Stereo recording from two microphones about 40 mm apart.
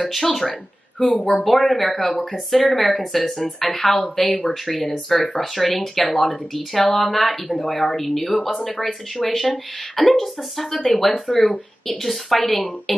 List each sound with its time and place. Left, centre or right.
0.1 s speech: centre
0.5 s speech: centre
5.4 s speech: centre
11.3 s speech: left
12.0 s speech: centre